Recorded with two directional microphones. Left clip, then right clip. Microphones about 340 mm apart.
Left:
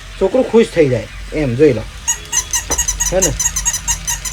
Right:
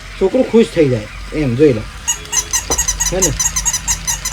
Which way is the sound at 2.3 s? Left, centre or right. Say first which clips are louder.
Right 2 dB; centre.